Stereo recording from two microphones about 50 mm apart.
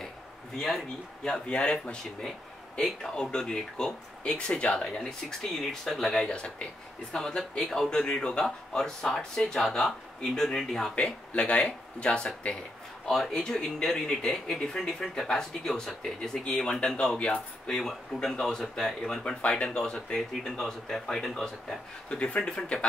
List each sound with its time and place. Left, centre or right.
0.6 s speech: centre
1.5 s speech: left
6.2 s speech: left
7.9 s speech: centre
8.5 s speech: centre
13.0 s speech: centre
19.4 s speech: centre
22.1 s speech: left